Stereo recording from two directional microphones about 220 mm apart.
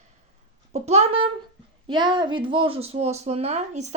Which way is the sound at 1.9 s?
20° right (ahead or behind).